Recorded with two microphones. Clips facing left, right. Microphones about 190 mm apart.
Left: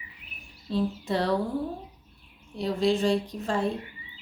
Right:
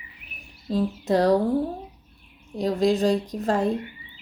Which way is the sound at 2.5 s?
40° right (ahead or behind).